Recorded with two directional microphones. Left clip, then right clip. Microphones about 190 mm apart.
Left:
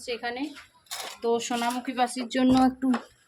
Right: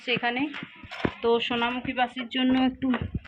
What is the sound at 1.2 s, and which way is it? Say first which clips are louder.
Speech: right 2 dB; 15° left (ahead or behind).